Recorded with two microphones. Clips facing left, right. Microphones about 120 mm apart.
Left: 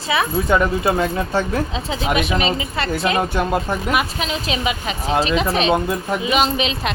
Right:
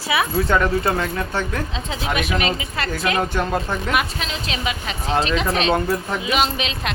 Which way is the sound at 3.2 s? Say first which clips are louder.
Left 2 dB; 10° left (ahead or behind).